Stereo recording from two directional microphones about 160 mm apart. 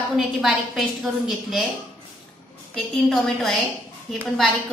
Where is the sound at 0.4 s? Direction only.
Centre (ahead or behind).